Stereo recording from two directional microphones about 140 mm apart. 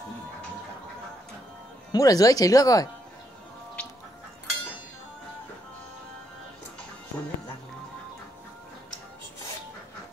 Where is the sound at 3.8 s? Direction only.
10° left (ahead or behind).